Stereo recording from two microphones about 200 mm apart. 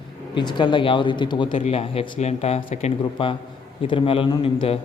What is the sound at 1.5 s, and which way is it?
A man's voice, 35° left (ahead or behind).